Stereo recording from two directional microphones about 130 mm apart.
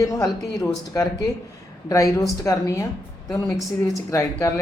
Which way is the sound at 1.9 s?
25° left (ahead or behind).